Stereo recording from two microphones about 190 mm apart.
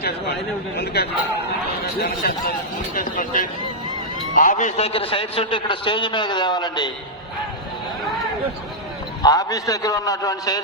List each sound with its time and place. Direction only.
0.0 s a man's voice: 60° left (ahead or behind); by 6.9 s 25° left (ahead or behind)
9.2 s a man's voice: 20° left (ahead or behind)